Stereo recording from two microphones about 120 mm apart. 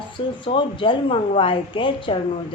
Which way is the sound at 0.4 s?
45° left (ahead or behind).